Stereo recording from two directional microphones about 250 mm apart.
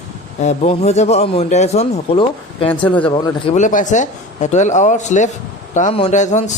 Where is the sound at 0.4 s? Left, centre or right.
Left.